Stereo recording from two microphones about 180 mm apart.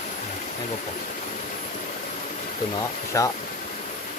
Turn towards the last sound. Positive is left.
turn(degrees=15)  # may be behind; listen again after turning